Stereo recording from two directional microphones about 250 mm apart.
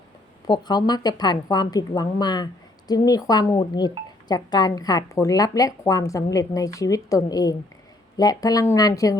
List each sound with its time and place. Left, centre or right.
0.4 s speech: centre